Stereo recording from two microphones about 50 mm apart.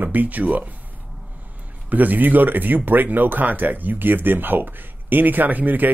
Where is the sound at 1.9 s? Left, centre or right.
Right.